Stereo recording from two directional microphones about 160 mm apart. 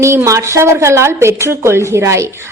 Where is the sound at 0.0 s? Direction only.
15° right (ahead or behind).